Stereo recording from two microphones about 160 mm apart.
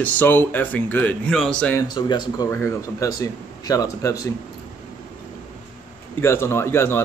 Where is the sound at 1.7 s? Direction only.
25° left (ahead or behind).